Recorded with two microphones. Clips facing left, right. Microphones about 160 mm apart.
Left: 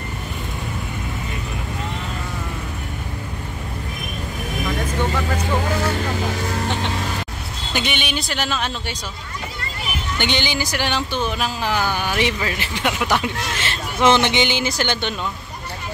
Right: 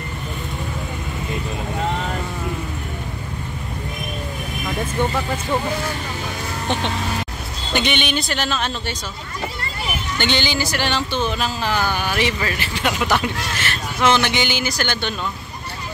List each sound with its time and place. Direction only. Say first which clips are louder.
7.7 s speech: right 3 dB; 5° left (ahead or behind)
10.1 s speech: right 1 dB; 15° left (ahead or behind)